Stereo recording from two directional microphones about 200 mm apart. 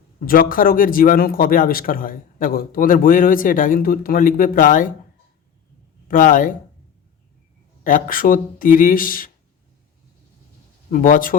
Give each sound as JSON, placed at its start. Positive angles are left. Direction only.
{"t": 0.3, "sound": "speech", "side_deg": 45}
{"t": 6.1, "sound": "speech", "side_deg": 40}
{"t": 7.9, "sound": "speech", "side_deg": 45}
{"t": 10.9, "sound": "speech", "side_deg": 40}